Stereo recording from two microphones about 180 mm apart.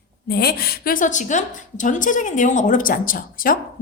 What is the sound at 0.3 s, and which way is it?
A woman's voice, 60° left (ahead or behind).